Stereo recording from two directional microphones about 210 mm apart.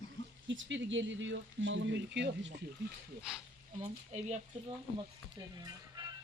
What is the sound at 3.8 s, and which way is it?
Speech, 30° right (ahead or behind).